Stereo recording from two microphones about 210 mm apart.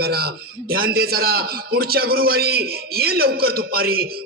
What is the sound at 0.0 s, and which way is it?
A man's voice, 50° right (ahead or behind).